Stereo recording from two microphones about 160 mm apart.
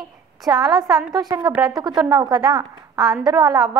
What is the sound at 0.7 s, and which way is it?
A woman's voice, centre (ahead or behind).